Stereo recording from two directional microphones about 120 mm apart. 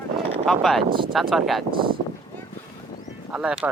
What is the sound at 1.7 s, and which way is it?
Speech, 45° right (ahead or behind).